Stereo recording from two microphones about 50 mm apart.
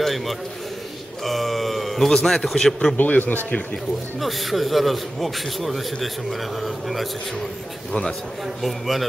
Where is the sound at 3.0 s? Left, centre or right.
Left.